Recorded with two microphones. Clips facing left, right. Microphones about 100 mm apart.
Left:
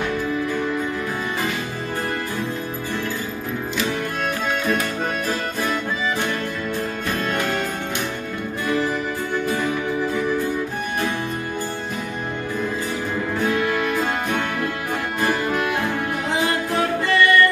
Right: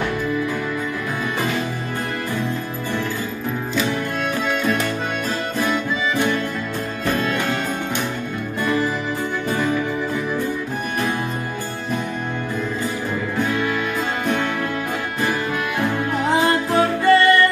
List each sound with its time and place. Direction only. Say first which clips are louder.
16.7 s music: right 6 dB; 25° right (ahead or behind)